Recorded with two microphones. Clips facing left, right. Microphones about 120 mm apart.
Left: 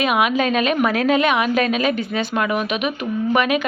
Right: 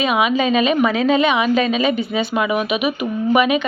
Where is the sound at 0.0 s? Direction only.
Centre (ahead or behind).